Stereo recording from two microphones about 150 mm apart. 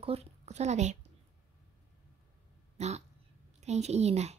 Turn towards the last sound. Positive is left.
turn(degrees=-45)  # may be behind; listen again after turning